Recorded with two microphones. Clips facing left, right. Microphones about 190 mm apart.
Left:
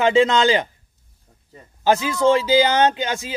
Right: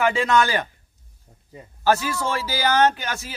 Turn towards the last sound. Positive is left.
turn(degrees=20)  # may be behind; listen again after turning